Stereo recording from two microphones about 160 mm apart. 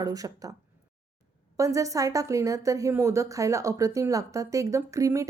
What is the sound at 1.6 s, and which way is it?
A woman's voice, 20° right (ahead or behind).